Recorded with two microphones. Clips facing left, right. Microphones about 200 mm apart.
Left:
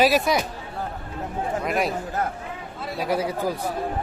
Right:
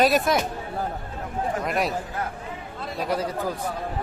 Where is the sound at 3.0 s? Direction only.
5° left (ahead or behind).